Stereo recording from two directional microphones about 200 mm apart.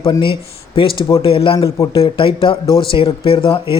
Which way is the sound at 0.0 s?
25° left (ahead or behind).